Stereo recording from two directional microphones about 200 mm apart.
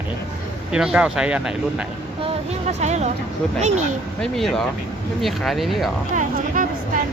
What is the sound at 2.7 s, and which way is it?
Speech, 35° right (ahead or behind).